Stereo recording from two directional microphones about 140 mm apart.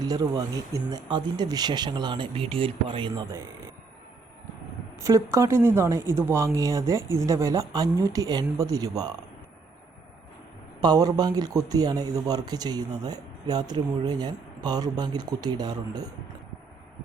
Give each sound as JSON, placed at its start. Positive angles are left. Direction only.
{"t": 0.0, "sound": "speech", "side_deg": -25}
{"t": 4.9, "sound": "speech", "side_deg": -20}
{"t": 10.8, "sound": "speech", "side_deg": -30}